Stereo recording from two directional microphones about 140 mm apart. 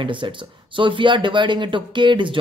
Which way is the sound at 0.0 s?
35° right (ahead or behind).